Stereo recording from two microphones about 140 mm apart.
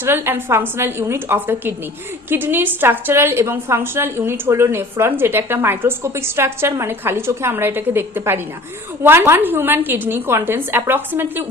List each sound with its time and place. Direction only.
0.0 s a woman's voice: 15° right (ahead or behind)